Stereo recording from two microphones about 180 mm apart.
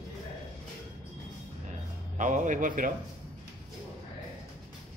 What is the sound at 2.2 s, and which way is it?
Speech, 45° right (ahead or behind).